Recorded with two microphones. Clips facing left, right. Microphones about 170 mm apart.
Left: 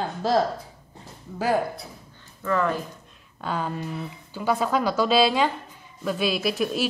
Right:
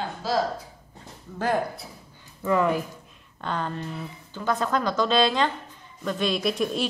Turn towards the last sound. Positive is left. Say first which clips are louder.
# even
turn(degrees=5)  # may be behind; listen again after turning